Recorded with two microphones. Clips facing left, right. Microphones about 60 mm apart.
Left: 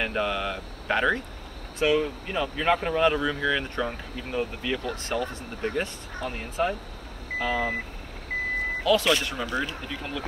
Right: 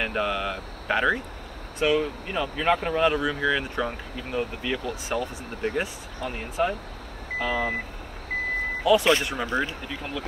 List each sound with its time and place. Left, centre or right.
0.0 s speech: centre
7.3 s speech: centre
8.8 s speech: right
9.8 s speech: centre